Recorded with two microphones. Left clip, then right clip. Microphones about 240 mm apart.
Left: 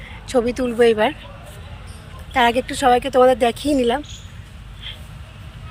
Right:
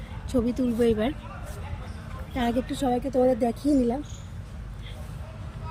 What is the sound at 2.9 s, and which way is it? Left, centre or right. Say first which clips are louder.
Speech: left 10 dB; left.